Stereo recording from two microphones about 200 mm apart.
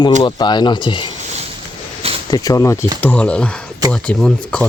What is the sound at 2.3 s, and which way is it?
Speech, 15° left (ahead or behind).